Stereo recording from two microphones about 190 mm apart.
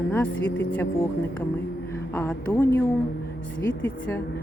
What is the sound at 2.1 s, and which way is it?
Speech, 10° left (ahead or behind).